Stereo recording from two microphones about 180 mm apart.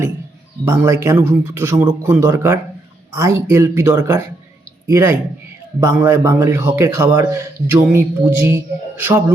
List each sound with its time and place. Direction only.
0.6 s a man's voice: 15° right (ahead or behind)